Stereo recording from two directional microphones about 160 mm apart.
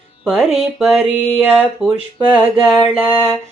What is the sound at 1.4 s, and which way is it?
Music, 10° right (ahead or behind).